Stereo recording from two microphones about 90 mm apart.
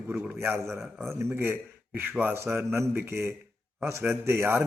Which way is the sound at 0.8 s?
Centre (ahead or behind).